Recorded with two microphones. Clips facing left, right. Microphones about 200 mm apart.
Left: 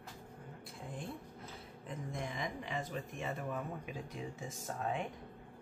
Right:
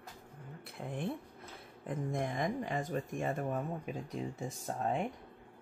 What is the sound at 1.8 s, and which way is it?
Speech, 50° right (ahead or behind).